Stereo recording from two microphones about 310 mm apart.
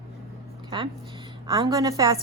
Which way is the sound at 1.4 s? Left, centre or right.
Centre.